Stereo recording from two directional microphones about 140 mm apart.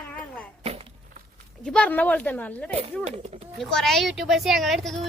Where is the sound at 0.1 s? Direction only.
5° left (ahead or behind).